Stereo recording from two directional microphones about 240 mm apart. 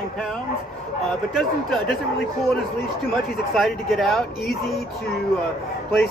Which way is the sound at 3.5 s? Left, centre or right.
Centre.